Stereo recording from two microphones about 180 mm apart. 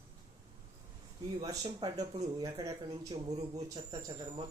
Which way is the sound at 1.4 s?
20° right (ahead or behind).